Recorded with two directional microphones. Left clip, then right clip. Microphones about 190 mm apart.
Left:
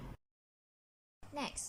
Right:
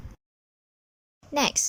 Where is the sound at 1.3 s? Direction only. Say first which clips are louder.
Right 18 dB; 40° right (ahead or behind).